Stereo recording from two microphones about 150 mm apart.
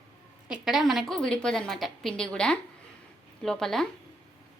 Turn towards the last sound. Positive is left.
turn(degrees=5)  # may be behind; listen again after turning